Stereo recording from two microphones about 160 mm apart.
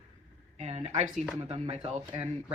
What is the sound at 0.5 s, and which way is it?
Speech, 45° right (ahead or behind).